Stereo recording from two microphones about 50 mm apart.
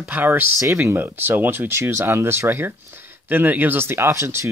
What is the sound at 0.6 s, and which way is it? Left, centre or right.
Speech, right.